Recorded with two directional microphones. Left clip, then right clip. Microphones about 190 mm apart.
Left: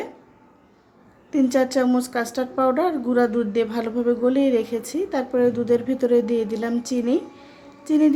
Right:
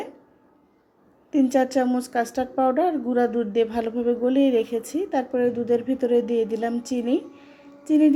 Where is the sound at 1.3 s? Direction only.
5° right (ahead or behind).